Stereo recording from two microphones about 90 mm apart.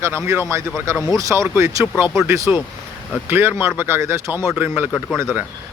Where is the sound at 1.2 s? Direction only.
35° right (ahead or behind).